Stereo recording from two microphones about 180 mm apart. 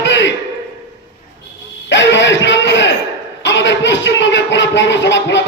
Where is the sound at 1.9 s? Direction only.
90° left.